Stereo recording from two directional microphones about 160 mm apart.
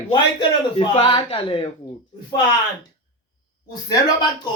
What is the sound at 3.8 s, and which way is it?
Speech, 25° left (ahead or behind).